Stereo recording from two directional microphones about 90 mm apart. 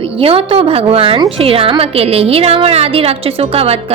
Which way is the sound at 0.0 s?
90° right.